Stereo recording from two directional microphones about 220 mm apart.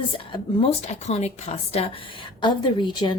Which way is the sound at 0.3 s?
30° left (ahead or behind).